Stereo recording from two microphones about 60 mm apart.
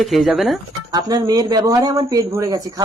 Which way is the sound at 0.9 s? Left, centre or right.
Right.